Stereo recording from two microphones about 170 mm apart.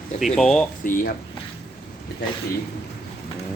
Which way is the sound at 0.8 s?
50° left (ahead or behind).